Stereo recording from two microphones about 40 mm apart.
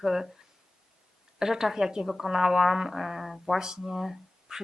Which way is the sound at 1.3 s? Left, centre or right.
Centre.